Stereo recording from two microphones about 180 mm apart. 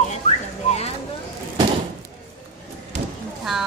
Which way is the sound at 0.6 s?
35° left (ahead or behind).